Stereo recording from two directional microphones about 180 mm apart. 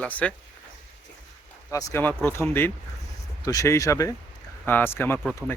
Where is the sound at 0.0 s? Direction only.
10° left (ahead or behind).